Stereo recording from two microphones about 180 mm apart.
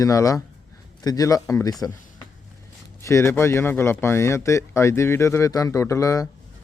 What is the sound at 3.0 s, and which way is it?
Speech, 15° left (ahead or behind).